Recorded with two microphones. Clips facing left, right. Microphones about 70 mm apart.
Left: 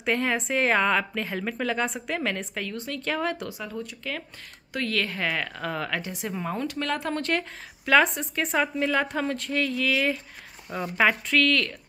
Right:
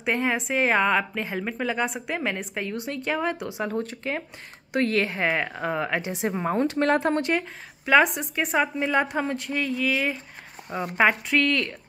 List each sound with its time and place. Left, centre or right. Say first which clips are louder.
0.0 s a woman's voice: right 1 dB; centre
3.6 s speech: right 6 dB; right
4.7 s a woman's voice: right 5 dB; right
7.2 s a woman's voice: right 3 dB; centre